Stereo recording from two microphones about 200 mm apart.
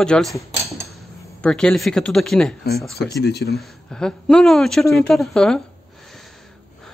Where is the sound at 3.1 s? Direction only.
55° left (ahead or behind).